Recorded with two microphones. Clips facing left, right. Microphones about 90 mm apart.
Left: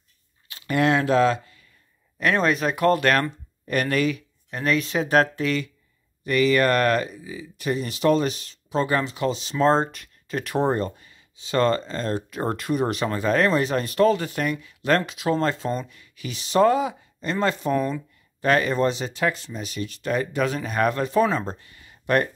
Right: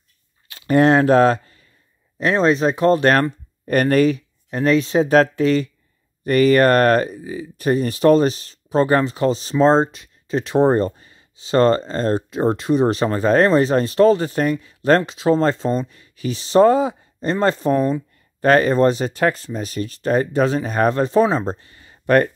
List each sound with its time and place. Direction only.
0.5 s a sound: 35° right (ahead or behind)
2.1 s speech: 30° right (ahead or behind)
6.2 s speech: 45° right (ahead or behind)
12.3 s speech: 25° right (ahead or behind)